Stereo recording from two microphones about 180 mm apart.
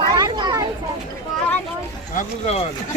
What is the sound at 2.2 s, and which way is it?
Speech, 35° left (ahead or behind).